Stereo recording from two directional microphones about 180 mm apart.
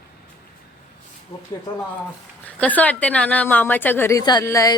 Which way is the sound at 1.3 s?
30° left (ahead or behind).